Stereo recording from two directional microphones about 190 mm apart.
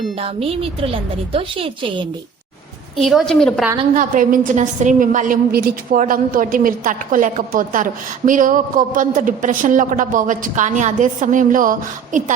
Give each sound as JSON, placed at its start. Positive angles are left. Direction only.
{"t": 0.2, "sound": "a woman's voice", "side_deg": -30}
{"t": 3.0, "sound": "a woman's voice", "side_deg": 0}
{"t": 3.9, "sound": "a woman's voice", "side_deg": -45}